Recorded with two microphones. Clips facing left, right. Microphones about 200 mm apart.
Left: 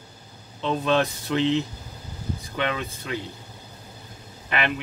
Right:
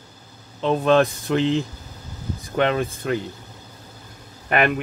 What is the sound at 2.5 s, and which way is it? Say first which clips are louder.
Speech: right 8 dB; 50° right (ahead or behind).